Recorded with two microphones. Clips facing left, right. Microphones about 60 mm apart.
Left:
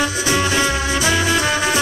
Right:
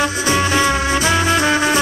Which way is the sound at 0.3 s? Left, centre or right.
Right.